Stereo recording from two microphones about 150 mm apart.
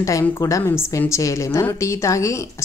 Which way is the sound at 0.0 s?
20° left (ahead or behind).